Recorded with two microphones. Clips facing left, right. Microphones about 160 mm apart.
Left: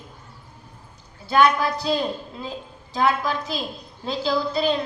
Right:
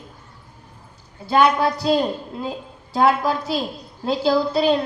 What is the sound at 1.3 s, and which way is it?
Speech, 30° right (ahead or behind).